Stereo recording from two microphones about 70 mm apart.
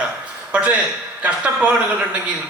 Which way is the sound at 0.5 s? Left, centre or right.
Centre.